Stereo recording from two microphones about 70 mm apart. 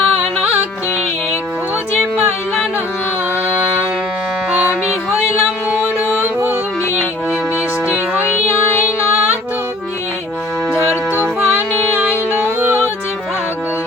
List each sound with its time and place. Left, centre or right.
3.5 s music: right
6.1 s music: right
7.9 s music: right
11.1 s music: right